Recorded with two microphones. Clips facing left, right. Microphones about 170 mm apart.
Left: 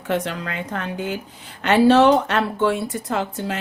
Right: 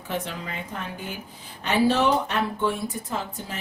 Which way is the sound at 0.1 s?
80° left.